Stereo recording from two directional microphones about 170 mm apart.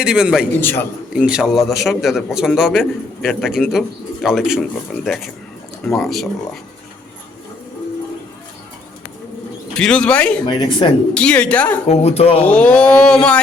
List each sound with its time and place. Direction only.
0.0 s a man's voice: 5° right (ahead or behind)
0.6 s speech: 15° left (ahead or behind)
1.1 s a man's voice: 5° right (ahead or behind)
9.7 s a man's voice: 5° left (ahead or behind)
11.9 s speech: 35° left (ahead or behind)
12.4 s speech: 5° left (ahead or behind)